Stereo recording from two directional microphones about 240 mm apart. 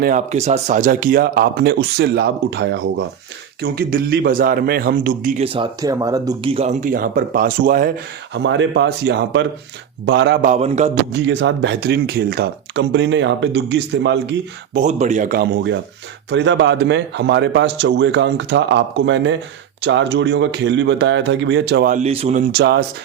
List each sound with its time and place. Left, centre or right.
0.0 s speech: right
5.4 s speech: right
10.4 s speech: right
11.1 s speech: right
14.8 s speech: right
22.5 s speech: right